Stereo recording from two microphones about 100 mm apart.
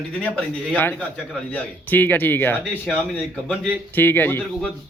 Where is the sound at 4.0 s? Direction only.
20° left (ahead or behind).